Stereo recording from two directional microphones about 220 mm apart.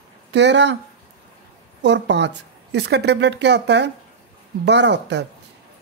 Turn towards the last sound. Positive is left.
turn(degrees=-50)  # may be behind; listen again after turning